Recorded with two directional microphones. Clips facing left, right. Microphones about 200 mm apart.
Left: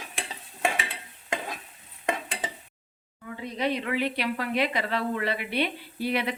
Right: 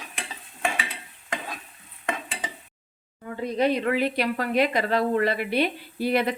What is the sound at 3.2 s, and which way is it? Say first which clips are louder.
Speech: right 6 dB; 45° right (ahead or behind).